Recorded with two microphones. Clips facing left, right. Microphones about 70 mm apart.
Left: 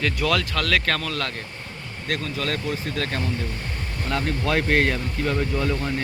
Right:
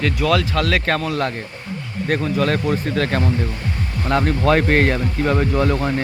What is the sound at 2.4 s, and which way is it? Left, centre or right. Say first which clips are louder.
Speech: right 8 dB; right.